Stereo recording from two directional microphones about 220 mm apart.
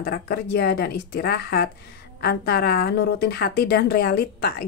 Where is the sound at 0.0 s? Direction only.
45° left (ahead or behind).